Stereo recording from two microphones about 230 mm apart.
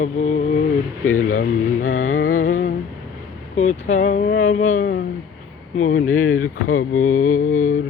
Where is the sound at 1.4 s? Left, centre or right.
Left.